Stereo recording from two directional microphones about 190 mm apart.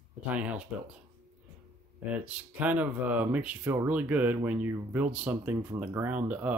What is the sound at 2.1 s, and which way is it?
Speech, 5° right (ahead or behind).